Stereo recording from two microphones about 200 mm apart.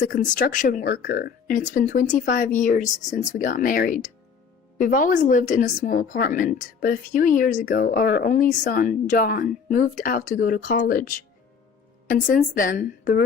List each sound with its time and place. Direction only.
0.0 s a woman's voice: 40° left (ahead or behind)